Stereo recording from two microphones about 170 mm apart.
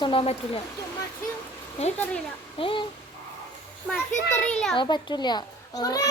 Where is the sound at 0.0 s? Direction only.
35° left (ahead or behind).